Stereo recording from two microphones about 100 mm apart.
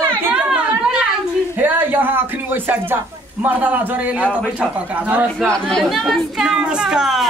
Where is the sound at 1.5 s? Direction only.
20° right (ahead or behind).